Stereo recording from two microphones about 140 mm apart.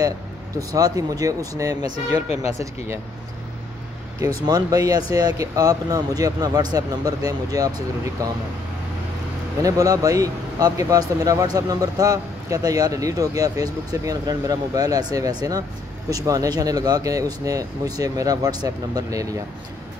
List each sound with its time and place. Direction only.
0.6 s speech: 25° right (ahead or behind)
2.2 s speech: 45° left (ahead or behind)
4.5 s speech: 25° right (ahead or behind)
9.6 s speech: 25° right (ahead or behind)